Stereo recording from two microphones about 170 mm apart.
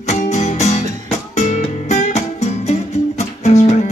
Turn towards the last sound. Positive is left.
turn(degrees=40)  # may be behind; listen again after turning